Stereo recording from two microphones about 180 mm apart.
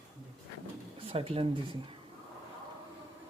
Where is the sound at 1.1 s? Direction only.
30° right (ahead or behind).